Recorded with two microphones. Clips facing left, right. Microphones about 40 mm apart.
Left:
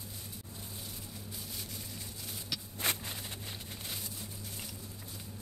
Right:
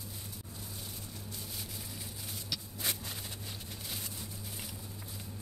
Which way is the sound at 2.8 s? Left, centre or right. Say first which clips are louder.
Left 4 dB; left.